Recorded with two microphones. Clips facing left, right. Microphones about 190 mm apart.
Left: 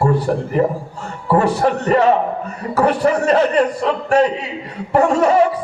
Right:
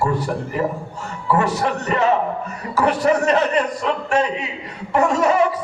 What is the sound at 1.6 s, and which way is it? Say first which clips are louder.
A man's voice: left 5 dB; 45° left (ahead or behind).